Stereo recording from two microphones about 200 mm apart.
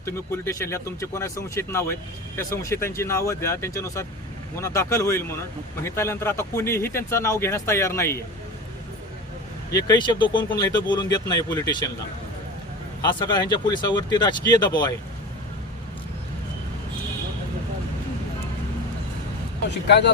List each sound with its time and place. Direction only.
0.0 s speech: 15° left (ahead or behind)
9.7 s speech: 20° left (ahead or behind)
13.0 s speech: 20° left (ahead or behind)